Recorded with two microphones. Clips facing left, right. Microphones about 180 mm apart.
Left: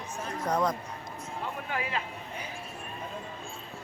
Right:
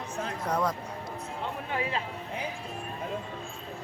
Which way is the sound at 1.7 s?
30° right (ahead or behind).